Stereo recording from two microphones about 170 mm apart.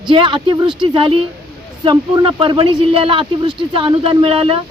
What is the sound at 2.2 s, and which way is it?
Speech, 30° right (ahead or behind).